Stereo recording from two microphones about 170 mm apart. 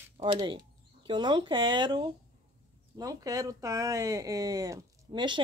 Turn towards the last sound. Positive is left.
turn(degrees=-25)  # may be behind; listen again after turning